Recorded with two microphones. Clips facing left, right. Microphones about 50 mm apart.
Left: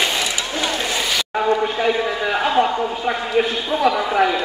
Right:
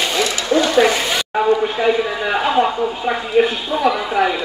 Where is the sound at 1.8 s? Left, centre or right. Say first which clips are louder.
Right 2 dB; centre.